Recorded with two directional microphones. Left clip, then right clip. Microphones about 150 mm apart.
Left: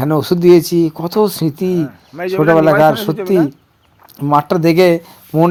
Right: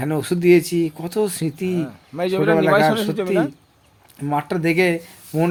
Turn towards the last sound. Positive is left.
turn(degrees=45)  # may be behind; listen again after turning